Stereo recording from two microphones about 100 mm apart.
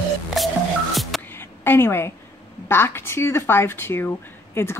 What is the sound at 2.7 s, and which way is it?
Speech, 25° left (ahead or behind).